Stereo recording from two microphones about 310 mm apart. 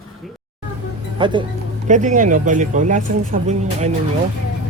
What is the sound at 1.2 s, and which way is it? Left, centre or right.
Speech, centre.